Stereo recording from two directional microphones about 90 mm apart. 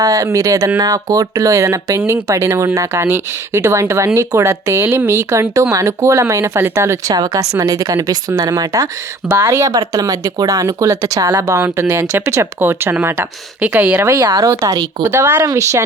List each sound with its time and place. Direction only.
0.0 s speech: 40° right (ahead or behind)
7.1 s speech: 45° right (ahead or behind)
9.3 s speech: 30° right (ahead or behind)
9.7 s speech: 40° right (ahead or behind); by 14.0 s 15° right (ahead or behind)
14.0 s speech: 35° right (ahead or behind)
15.0 s speech: 25° right (ahead or behind)